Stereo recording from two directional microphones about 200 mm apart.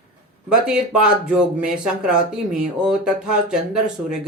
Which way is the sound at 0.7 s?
5° right (ahead or behind).